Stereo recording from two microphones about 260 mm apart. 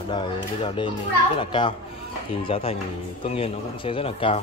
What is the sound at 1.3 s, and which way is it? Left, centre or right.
Speech, centre.